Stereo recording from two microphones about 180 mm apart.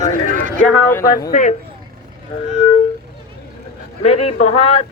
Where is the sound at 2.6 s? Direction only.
40° left (ahead or behind).